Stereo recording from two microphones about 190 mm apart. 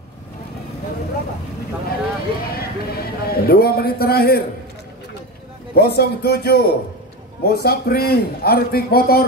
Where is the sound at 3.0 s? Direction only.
55° left (ahead or behind).